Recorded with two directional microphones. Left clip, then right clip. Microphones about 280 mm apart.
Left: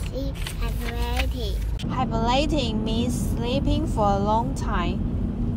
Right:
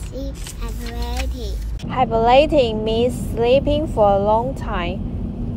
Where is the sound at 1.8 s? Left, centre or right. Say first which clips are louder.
Right 9 dB; centre.